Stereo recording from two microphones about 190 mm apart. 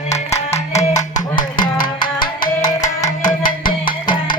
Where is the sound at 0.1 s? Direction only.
15° left (ahead or behind).